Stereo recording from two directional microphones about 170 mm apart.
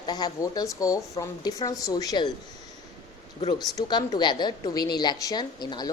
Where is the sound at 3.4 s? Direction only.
25° left (ahead or behind).